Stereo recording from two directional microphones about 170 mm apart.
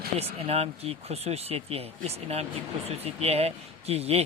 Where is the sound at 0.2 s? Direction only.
35° right (ahead or behind).